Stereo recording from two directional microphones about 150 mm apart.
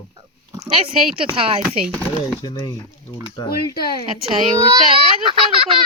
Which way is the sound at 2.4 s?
30° left (ahead or behind).